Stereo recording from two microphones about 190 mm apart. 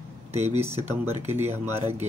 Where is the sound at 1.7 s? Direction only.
35° right (ahead or behind).